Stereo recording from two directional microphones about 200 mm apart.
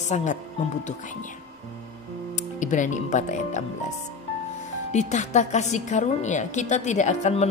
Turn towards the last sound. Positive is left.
turn(degrees=35)  # may be behind; listen again after turning